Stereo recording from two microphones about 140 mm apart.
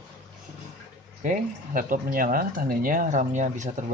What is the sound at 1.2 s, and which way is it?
Speech, 70° right (ahead or behind).